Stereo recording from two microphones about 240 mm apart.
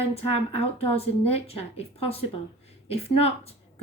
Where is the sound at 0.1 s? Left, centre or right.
Left.